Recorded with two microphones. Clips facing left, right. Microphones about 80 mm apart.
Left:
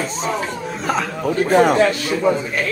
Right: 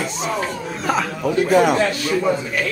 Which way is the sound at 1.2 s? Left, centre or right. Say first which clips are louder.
Left 1 dB; left.